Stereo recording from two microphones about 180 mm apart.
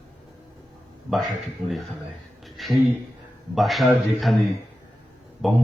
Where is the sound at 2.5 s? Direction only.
Centre (ahead or behind).